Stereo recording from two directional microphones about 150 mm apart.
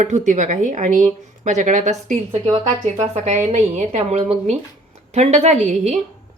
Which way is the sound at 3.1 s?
50° right (ahead or behind).